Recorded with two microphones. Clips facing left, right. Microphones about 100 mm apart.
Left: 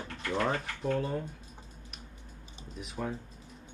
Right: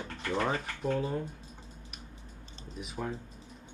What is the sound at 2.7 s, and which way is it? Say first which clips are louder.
Speech: even; centre (ahead or behind).